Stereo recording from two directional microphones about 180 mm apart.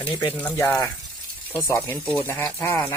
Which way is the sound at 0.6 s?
15° left (ahead or behind).